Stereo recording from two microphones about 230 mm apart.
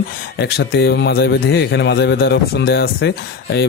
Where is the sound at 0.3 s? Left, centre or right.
Left.